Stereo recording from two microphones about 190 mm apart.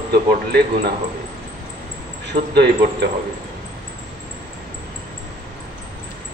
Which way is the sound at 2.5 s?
60° right (ahead or behind).